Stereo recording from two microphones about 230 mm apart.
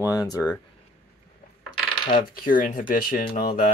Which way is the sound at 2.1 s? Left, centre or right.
Left.